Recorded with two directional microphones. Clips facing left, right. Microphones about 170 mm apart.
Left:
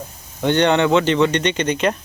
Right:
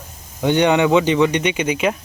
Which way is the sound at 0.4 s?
10° right (ahead or behind).